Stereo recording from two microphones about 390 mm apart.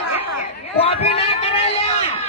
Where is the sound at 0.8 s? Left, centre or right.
Centre.